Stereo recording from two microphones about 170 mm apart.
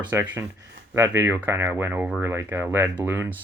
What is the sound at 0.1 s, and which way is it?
Speech, 15° right (ahead or behind).